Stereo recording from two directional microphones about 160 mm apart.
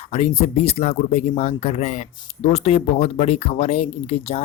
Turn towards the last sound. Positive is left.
turn(degrees=40)  # may be behind; listen again after turning